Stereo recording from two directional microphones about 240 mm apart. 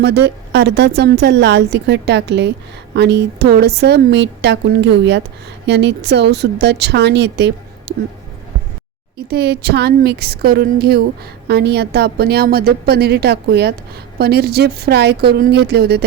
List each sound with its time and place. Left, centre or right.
0.5 s speech: right
9.1 s a woman's voice: right